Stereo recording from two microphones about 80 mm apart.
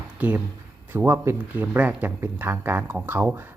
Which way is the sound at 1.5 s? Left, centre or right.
Centre.